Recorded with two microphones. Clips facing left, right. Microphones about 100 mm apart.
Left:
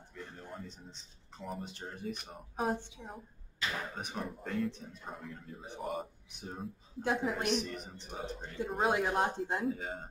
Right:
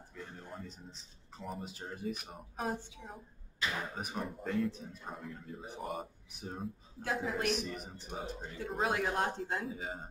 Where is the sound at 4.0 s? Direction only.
5° right (ahead or behind).